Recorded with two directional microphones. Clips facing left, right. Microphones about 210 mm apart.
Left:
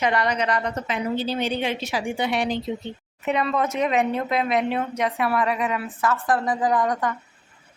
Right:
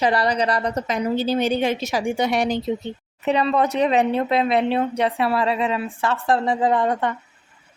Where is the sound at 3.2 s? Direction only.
30° right (ahead or behind).